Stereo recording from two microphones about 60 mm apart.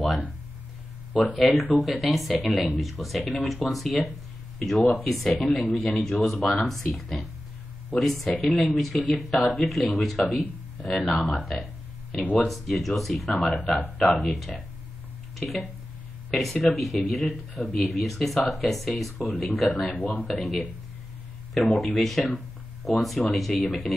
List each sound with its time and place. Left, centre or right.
1.3 s speech: centre
12.1 s speech: left
12.4 s speech: centre
19.9 s speech: left
20.2 s speech: centre